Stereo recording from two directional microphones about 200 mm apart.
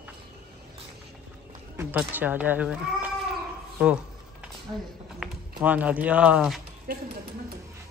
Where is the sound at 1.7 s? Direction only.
10° right (ahead or behind).